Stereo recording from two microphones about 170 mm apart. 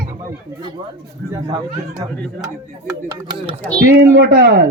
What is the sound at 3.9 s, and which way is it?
Speech, 80° right.